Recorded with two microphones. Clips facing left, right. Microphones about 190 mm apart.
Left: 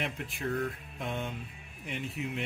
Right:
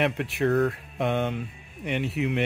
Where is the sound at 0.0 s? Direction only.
70° right (ahead or behind).